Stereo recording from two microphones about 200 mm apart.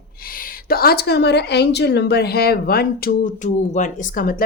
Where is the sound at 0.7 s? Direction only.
50° left (ahead or behind).